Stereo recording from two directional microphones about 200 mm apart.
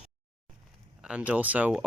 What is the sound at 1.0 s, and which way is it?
Speech, 5° right (ahead or behind).